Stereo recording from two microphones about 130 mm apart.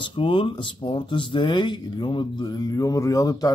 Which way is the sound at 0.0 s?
40° left (ahead or behind).